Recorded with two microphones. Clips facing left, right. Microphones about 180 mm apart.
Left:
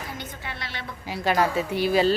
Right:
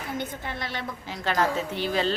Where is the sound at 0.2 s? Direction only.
45° right (ahead or behind).